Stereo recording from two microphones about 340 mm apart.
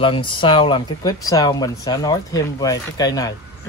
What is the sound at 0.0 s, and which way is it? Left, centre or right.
Speech, centre.